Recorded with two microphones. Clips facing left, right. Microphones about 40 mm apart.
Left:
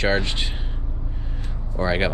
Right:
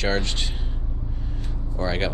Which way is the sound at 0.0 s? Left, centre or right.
Centre.